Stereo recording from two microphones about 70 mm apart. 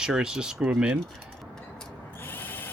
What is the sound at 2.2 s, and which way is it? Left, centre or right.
Owl, left.